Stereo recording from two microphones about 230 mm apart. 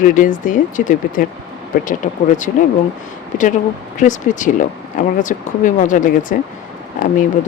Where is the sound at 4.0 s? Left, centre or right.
Left.